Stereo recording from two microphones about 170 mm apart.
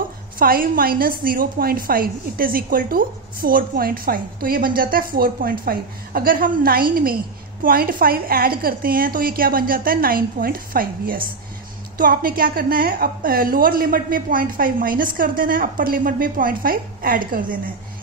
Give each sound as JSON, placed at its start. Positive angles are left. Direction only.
{"t": 0.4, "sound": "a woman's voice", "side_deg": -60}